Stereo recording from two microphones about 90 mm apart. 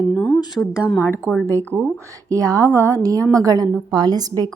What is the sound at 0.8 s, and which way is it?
Speech, 15° left (ahead or behind).